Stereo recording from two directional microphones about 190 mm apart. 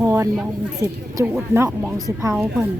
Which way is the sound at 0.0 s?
15° right (ahead or behind).